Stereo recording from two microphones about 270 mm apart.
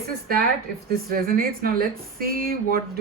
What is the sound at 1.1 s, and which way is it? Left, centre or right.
Speech, right.